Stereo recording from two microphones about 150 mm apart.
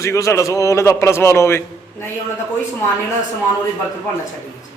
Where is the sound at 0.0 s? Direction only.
20° left (ahead or behind).